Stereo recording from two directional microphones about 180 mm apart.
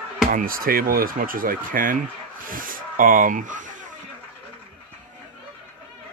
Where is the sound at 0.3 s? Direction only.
50° right (ahead or behind).